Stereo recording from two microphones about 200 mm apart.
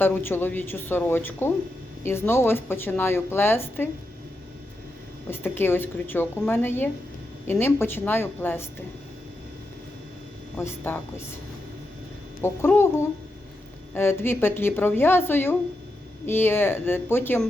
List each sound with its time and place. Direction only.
0.0 s a woman's voice: 10° left (ahead or behind)
5.3 s a woman's voice: 10° left (ahead or behind)
10.6 s a woman's voice: 10° left (ahead or behind)
12.4 s a woman's voice: 10° left (ahead or behind)